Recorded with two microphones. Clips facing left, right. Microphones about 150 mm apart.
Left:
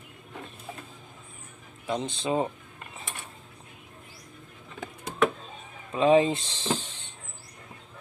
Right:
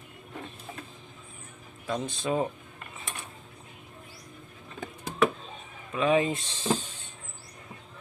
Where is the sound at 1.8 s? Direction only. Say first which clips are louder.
Left 1 dB; 20° left (ahead or behind).